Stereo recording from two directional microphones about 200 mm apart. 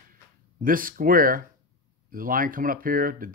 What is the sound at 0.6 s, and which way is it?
Speech, 45° right (ahead or behind).